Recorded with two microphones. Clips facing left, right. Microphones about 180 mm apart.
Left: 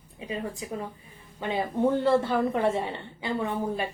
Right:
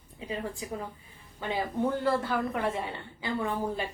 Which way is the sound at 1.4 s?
20° left (ahead or behind).